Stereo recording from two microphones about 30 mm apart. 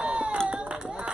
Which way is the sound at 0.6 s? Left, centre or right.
Right.